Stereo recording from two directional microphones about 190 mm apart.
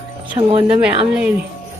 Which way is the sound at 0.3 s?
25° right (ahead or behind).